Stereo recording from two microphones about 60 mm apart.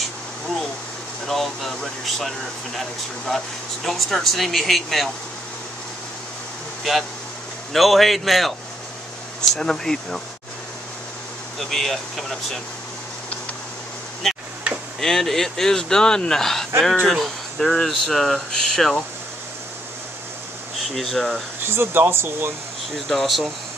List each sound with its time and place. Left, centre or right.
1.2 s speech: centre
6.8 s speech: centre
11.7 s speech: centre
14.2 s a sound: centre
15.0 s speech: centre
20.9 s speech: centre
21.6 s speech: right
22.9 s speech: centre